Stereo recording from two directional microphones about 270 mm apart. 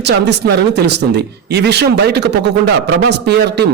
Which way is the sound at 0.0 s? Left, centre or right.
Right.